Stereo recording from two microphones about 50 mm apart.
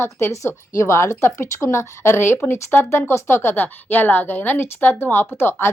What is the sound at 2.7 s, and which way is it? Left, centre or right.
Speech, left.